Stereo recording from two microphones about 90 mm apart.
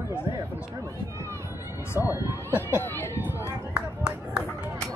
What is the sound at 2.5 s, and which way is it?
Speech, 25° left (ahead or behind).